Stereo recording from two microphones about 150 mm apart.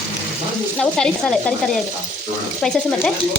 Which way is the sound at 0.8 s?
5° left (ahead or behind).